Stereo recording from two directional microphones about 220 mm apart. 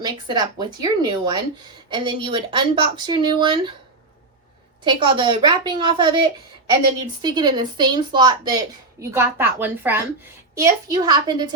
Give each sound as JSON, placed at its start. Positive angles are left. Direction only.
{"t": 0.0, "sound": "speech", "side_deg": -20}
{"t": 4.8, "sound": "speech", "side_deg": -20}